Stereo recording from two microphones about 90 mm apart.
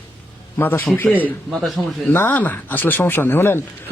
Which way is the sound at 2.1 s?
25° left (ahead or behind).